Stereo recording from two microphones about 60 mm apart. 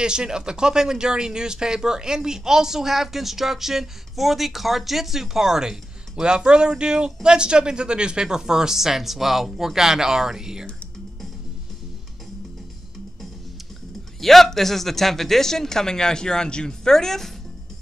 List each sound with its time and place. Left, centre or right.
0.0 s speech: centre
14.2 s speech: centre